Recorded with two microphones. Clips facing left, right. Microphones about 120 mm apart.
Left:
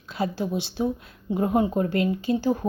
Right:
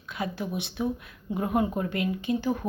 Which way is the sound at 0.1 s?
30° left (ahead or behind).